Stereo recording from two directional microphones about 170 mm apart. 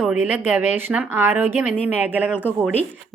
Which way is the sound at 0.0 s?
10° right (ahead or behind).